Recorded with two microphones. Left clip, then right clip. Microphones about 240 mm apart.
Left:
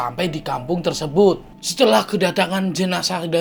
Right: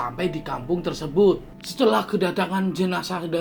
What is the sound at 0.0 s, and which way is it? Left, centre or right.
Speech, left.